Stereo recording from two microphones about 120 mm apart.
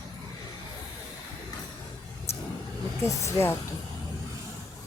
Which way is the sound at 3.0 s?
25° left (ahead or behind).